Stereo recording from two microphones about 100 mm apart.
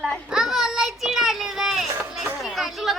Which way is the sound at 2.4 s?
Centre (ahead or behind).